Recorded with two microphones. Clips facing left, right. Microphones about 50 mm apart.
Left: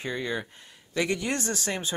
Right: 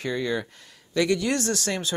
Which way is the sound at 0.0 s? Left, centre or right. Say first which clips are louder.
Right 4 dB; left.